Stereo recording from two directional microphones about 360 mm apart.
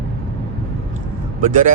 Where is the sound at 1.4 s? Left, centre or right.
Right.